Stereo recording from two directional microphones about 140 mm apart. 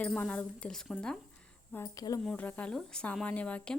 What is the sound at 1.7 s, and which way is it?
Speech, 25° left (ahead or behind).